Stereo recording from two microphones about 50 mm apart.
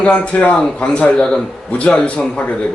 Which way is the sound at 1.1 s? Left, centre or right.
Centre.